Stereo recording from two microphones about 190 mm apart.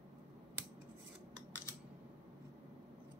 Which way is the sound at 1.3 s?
10° left (ahead or behind).